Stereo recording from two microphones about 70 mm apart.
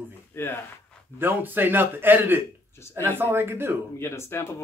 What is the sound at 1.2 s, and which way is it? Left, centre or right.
Speech, right.